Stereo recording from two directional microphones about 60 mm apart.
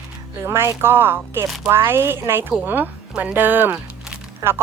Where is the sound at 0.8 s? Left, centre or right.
Right.